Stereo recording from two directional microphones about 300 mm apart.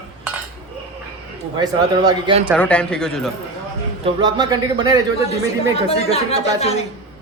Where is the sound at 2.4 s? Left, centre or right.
Centre.